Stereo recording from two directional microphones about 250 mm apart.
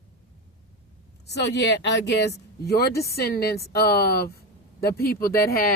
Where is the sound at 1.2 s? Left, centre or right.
Left.